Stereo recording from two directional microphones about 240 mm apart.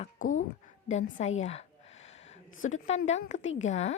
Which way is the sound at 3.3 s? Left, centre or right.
Left.